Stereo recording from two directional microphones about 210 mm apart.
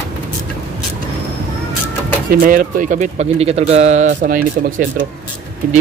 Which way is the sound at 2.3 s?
40° right (ahead or behind).